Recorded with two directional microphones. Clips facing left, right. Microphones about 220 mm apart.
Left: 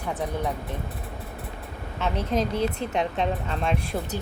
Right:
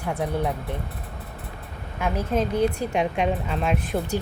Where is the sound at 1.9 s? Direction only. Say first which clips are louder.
Right 1 dB; 10° right (ahead or behind).